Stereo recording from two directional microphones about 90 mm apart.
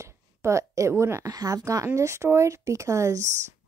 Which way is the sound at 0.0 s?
35° right (ahead or behind).